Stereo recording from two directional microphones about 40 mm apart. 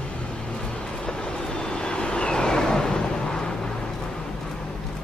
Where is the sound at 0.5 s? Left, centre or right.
Centre.